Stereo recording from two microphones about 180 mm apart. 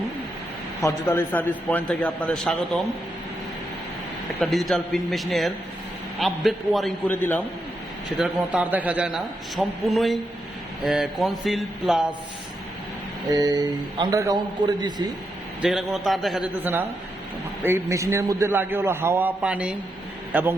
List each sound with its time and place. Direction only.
0.9 s a man's voice: 10° left (ahead or behind)
4.4 s a man's voice: centre (ahead or behind)
8.2 s a man's voice: 10° right (ahead or behind)
13.3 s speech: 20° right (ahead or behind)
15.6 s a man's voice: centre (ahead or behind)
17.6 s a man's voice: 15° right (ahead or behind)